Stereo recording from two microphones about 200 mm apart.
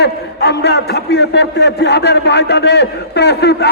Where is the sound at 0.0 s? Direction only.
55° left (ahead or behind).